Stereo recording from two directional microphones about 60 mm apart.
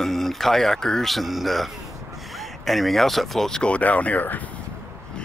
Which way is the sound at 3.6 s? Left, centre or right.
Left.